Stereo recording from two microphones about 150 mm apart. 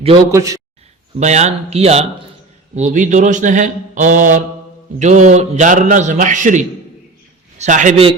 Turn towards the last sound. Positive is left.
turn(degrees=-55)  # may be behind; listen again after turning